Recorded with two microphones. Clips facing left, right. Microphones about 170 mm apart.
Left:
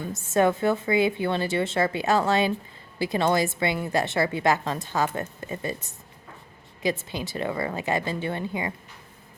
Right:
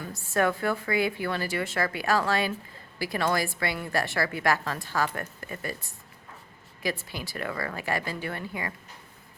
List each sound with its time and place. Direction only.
0.0 s a woman's voice: 20° left (ahead or behind)